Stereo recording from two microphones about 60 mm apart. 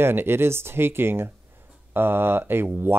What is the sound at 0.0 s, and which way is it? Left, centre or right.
Speech, right.